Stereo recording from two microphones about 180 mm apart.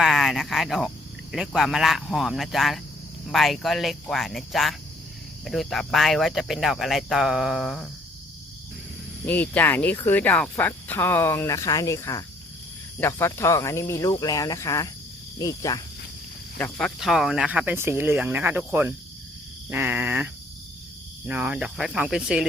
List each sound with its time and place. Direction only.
0.0 s speech: centre (ahead or behind)
9.2 s speech: 10° left (ahead or behind)
16.6 s speech: 5° left (ahead or behind)